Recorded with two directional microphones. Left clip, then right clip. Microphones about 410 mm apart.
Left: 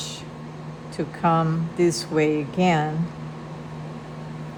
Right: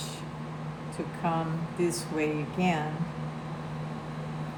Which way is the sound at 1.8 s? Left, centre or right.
Left.